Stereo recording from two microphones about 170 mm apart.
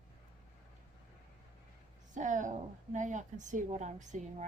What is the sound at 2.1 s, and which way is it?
A woman's voice, 45° right (ahead or behind).